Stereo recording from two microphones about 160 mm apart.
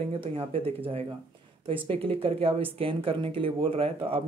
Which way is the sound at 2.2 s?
35° right (ahead or behind).